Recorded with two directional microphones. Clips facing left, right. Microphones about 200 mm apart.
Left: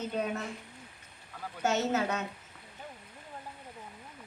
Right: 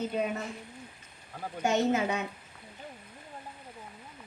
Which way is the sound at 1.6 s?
15° right (ahead or behind).